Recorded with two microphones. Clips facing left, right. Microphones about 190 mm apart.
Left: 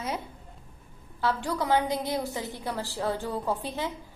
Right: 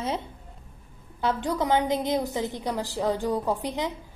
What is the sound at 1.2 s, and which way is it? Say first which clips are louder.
A woman's voice: right 2 dB; 20° right (ahead or behind).